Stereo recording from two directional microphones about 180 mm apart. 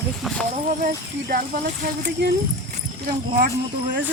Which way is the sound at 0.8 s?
55° right (ahead or behind).